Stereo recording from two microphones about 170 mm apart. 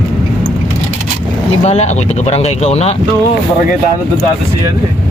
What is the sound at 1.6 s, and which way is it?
Speech, 40° left (ahead or behind).